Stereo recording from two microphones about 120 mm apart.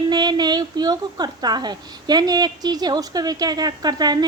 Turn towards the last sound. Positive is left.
turn(degrees=-35)  # may be behind; listen again after turning